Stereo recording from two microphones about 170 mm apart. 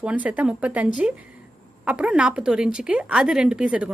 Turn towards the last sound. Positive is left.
turn(degrees=-5)  # may be behind; listen again after turning